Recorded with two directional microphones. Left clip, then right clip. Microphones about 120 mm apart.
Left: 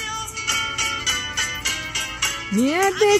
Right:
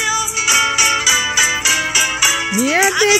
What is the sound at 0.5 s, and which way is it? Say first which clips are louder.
Music: right 9 dB; 50° right (ahead or behind).